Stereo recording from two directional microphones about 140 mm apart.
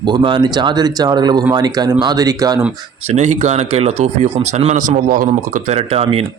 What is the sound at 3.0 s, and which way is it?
Speech, 55° right (ahead or behind).